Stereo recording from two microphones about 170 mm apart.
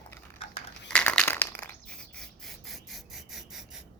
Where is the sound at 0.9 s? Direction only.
5° left (ahead or behind).